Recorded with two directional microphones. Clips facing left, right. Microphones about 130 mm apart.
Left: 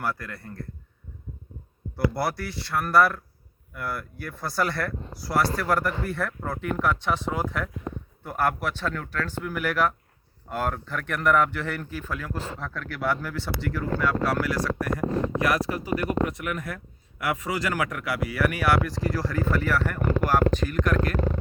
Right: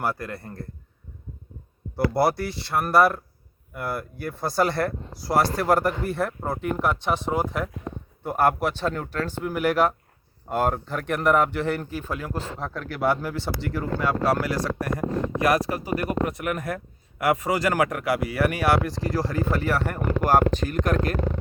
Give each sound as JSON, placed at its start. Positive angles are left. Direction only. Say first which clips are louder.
{"t": 0.0, "sound": "speech", "louder": "right 3 dB", "side_deg": -25}
{"t": 2.1, "sound": "speech", "louder": "right 6 dB", "side_deg": -25}